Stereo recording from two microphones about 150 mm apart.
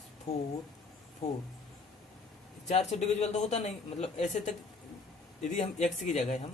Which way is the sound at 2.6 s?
50° left (ahead or behind).